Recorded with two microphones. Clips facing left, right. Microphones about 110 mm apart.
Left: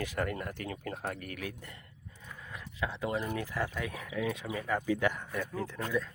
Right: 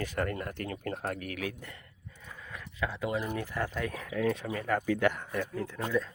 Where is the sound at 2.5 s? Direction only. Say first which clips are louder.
Right 2 dB; 20° left (ahead or behind).